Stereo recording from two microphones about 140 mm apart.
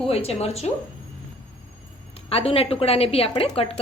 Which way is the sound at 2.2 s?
45° left (ahead or behind).